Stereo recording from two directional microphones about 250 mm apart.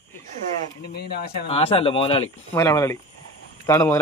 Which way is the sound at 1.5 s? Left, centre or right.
Left.